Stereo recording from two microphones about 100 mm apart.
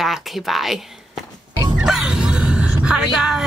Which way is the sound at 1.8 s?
5° right (ahead or behind).